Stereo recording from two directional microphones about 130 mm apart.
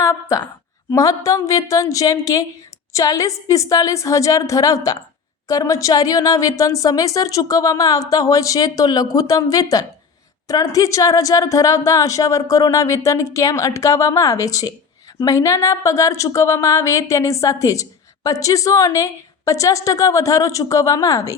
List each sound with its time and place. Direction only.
0.0 s a woman's voice: 25° left (ahead or behind)